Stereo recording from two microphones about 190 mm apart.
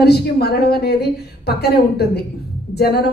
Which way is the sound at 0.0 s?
60° left (ahead or behind).